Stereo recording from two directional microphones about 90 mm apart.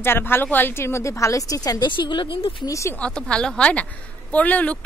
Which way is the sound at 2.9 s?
10° left (ahead or behind).